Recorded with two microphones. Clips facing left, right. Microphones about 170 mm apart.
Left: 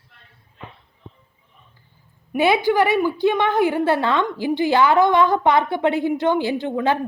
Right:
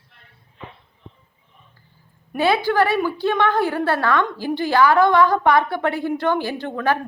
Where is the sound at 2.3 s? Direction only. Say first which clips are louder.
Left 2 dB; 15° left (ahead or behind).